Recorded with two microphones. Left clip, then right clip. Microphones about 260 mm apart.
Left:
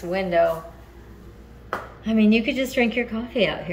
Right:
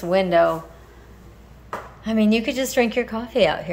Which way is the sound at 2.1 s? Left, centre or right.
Centre.